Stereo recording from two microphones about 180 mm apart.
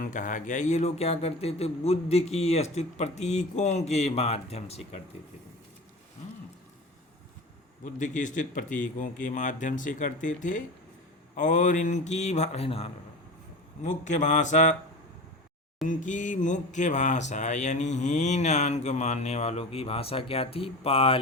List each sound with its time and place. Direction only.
0.0 s speech: 45° left (ahead or behind)
7.9 s speech: 45° left (ahead or behind)
13.8 s speech: 40° left (ahead or behind)
15.9 s speech: 45° left (ahead or behind)